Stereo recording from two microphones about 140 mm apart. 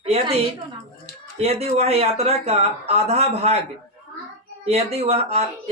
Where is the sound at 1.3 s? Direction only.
50° right (ahead or behind).